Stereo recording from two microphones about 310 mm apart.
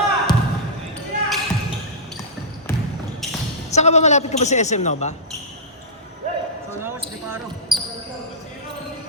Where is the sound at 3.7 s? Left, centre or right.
Left.